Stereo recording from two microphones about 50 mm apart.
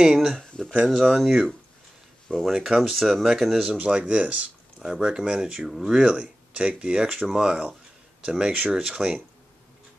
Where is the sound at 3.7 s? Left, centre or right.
Right.